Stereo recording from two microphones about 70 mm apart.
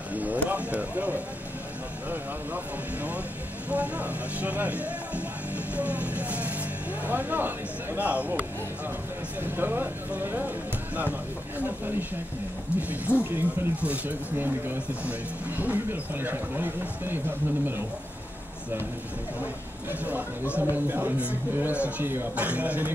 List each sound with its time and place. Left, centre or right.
0.1 s speech: right
19.4 s speech: right